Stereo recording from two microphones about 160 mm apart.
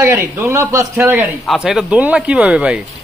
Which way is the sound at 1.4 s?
Centre (ahead or behind).